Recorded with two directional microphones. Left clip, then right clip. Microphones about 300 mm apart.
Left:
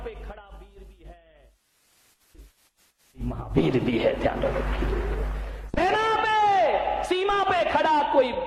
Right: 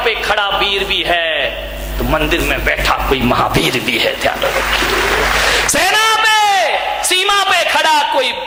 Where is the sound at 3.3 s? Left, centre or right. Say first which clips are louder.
Right 9 dB; centre.